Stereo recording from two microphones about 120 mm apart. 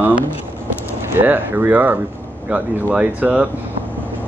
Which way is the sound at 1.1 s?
15° right (ahead or behind).